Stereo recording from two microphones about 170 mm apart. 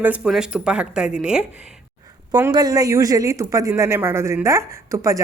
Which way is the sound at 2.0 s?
20° right (ahead or behind).